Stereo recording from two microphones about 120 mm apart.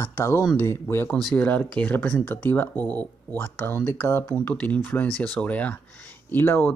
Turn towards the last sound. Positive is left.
turn(degrees=15)  # may be behind; listen again after turning